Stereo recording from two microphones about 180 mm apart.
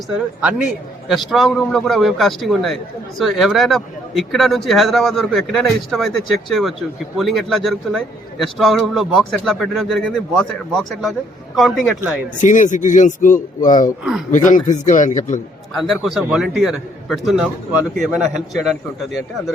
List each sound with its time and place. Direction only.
0.1 s a man's voice: 5° right (ahead or behind)
12.4 s speech: 45° left (ahead or behind)
14.0 s a man's voice: 5° right (ahead or behind)
14.3 s speech: 45° left (ahead or behind)
15.7 s a man's voice: centre (ahead or behind)